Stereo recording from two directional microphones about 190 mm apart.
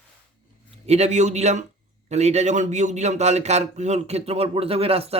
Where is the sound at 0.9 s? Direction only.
35° right (ahead or behind).